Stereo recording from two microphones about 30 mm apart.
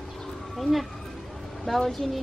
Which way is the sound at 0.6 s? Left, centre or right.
Centre.